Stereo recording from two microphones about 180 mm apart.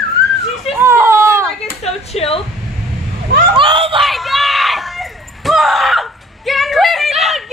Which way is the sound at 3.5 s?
30° right (ahead or behind).